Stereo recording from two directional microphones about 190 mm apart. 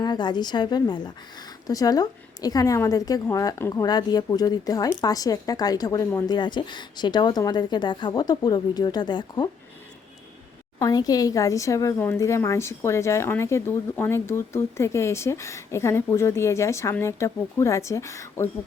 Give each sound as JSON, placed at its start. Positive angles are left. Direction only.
{"t": 0.0, "sound": "a woman's voice", "side_deg": 25}
{"t": 10.8, "sound": "speech", "side_deg": 20}